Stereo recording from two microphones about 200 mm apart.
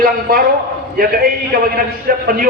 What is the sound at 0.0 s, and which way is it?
A man's voice, 50° right (ahead or behind).